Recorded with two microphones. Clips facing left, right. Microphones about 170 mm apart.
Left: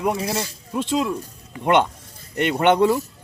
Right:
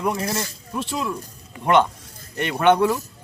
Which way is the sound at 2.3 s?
20° left (ahead or behind).